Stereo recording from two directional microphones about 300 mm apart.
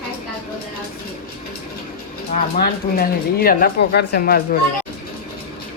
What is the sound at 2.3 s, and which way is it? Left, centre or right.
Speech, left.